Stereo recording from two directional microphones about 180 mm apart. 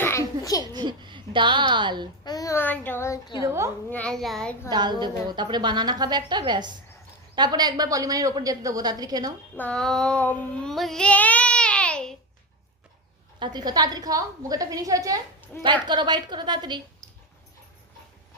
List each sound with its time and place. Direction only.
0.0 s a sound: 15° left (ahead or behind)
0.6 s a child's voice: 25° right (ahead or behind)
2.2 s a child's voice: 20° left (ahead or behind)
3.4 s a woman's voice: 15° right (ahead or behind)
3.8 s a child's voice: 10° left (ahead or behind)
4.7 s a woman's voice: 25° right (ahead or behind)
9.6 s child singing: 5° left (ahead or behind)
13.4 s a woman's voice: 25° right (ahead or behind)